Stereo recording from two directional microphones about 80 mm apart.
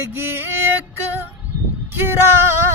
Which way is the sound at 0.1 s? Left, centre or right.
Right.